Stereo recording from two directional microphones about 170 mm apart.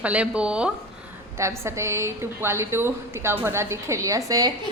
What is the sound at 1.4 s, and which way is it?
A woman's voice, 15° right (ahead or behind).